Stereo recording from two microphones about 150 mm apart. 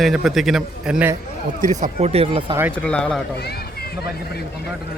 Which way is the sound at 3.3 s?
90° left.